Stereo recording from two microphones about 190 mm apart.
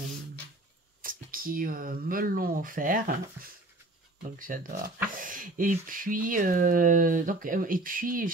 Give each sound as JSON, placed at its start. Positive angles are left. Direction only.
{"t": 1.0, "sound": "speech", "side_deg": -50}